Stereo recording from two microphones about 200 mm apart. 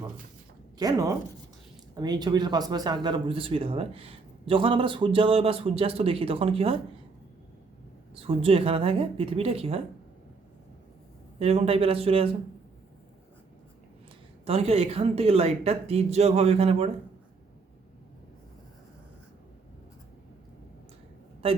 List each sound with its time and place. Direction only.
0.8 s speech: 20° right (ahead or behind)
8.1 s speech: 30° right (ahead or behind)
11.3 s speech: 30° right (ahead or behind)
14.4 s speech: 30° right (ahead or behind)
21.4 s speech: 30° right (ahead or behind)